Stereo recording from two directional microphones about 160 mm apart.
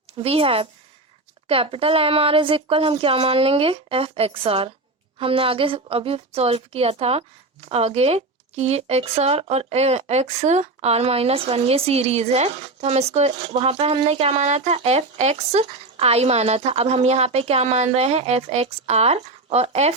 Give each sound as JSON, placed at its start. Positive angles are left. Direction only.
{"t": 0.2, "sound": "speech", "side_deg": -35}